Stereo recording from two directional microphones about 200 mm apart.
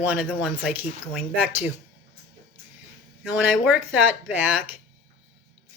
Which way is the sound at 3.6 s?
5° right (ahead or behind).